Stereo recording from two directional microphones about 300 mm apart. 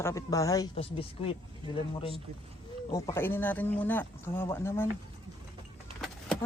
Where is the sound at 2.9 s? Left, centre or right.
Centre.